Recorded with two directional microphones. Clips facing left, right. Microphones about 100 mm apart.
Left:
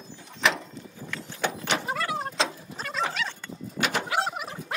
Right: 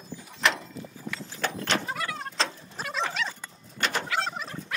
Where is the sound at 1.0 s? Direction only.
Centre (ahead or behind).